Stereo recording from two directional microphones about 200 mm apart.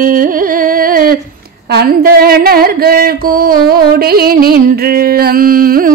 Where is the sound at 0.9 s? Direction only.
45° right (ahead or behind).